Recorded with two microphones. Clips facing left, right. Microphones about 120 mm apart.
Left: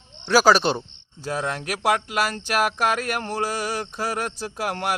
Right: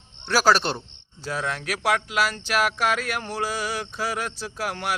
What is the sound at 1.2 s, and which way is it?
Speech, 45° left (ahead or behind).